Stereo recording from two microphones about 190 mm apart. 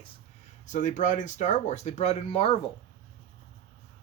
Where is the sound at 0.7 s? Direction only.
40° left (ahead or behind).